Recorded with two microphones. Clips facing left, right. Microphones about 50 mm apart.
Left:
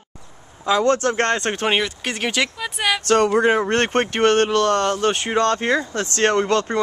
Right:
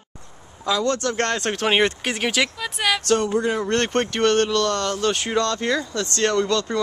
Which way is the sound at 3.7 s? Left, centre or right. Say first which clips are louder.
Left 2 dB; left.